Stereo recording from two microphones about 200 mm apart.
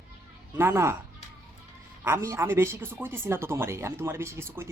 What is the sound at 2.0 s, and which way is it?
Speech, 15° right (ahead or behind).